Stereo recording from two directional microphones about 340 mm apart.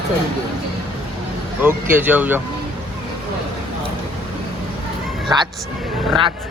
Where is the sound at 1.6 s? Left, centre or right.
Centre.